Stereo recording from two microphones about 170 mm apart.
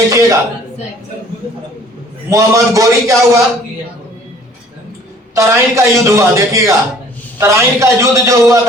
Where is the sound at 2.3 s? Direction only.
20° right (ahead or behind).